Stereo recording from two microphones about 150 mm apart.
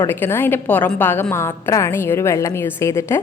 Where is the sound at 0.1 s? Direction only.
15° left (ahead or behind).